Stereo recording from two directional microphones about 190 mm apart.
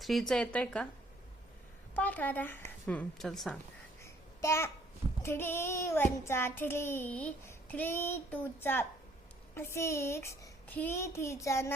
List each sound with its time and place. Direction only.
0.0 s a woman's voice: centre (ahead or behind)
2.0 s child singing: 10° left (ahead or behind)
4.0 s babbling: 15° left (ahead or behind)
5.2 s child singing: 10° left (ahead or behind)